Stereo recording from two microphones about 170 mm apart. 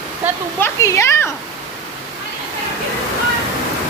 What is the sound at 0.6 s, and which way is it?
Speech, 15° left (ahead or behind).